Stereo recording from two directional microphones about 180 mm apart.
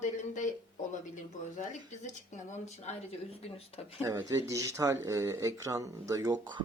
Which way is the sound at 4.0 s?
15° right (ahead or behind).